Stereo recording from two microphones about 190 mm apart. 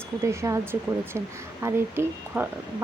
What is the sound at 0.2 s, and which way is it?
Speech, 15° right (ahead or behind).